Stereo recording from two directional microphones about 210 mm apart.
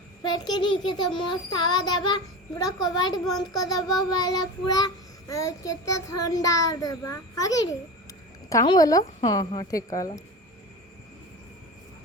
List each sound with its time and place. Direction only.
0.2 s a child's voice: 20° left (ahead or behind)
1.1 s child singing: 20° left (ahead or behind)